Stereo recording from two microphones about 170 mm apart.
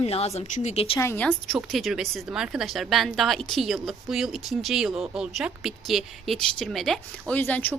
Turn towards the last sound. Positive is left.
turn(degrees=10)  # may be behind; listen again after turning